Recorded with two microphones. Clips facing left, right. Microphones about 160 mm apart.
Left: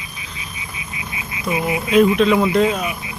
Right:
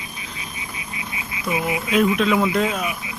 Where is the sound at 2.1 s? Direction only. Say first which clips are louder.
Left 4 dB; 5° right (ahead or behind).